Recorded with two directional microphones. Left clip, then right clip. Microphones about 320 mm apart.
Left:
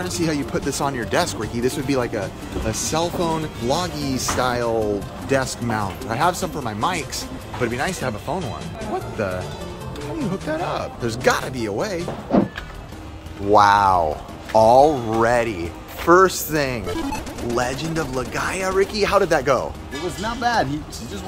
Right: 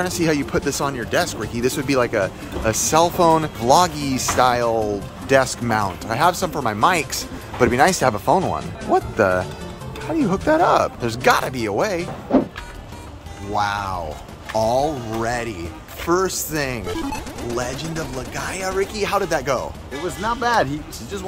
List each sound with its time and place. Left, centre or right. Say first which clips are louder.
0.0 s speech: right 3 dB; centre
10.3 s speech: right 10 dB; centre
13.6 s speech: left 8 dB; centre